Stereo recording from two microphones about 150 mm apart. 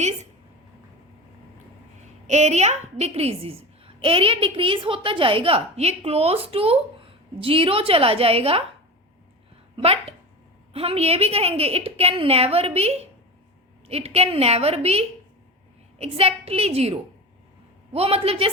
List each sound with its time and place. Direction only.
0.0 s a sound: 50° right (ahead or behind)
2.2 s a woman's voice: 50° right (ahead or behind)
9.7 s a woman's voice: 40° right (ahead or behind)